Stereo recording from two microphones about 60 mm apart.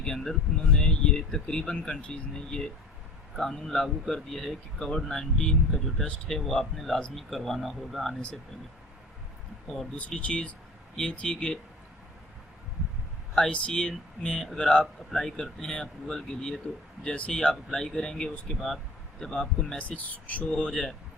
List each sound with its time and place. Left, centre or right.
0.0 s speech: centre
10.2 s speech: centre
13.3 s speech: centre
19.8 s speech: left